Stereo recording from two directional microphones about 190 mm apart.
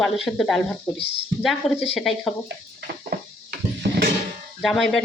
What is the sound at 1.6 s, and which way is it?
Speech, centre (ahead or behind).